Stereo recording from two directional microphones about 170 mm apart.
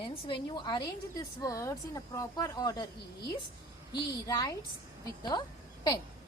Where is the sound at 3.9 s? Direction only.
20° left (ahead or behind).